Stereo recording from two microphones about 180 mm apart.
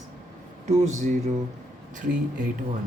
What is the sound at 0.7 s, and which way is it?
Speech, 40° right (ahead or behind).